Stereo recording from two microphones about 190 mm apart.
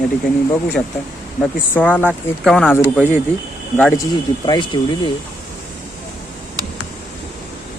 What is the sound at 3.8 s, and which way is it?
Speech, 10° left (ahead or behind).